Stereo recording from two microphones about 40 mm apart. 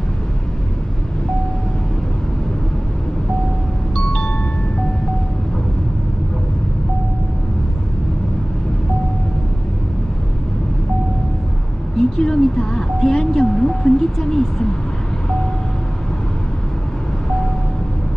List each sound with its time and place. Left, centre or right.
3.9 s chime: left
12.0 s music: centre